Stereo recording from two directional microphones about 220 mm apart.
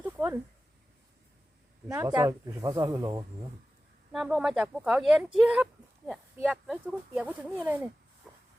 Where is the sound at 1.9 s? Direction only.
15° right (ahead or behind).